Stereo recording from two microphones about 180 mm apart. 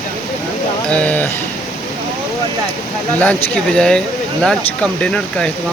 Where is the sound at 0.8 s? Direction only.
5° left (ahead or behind).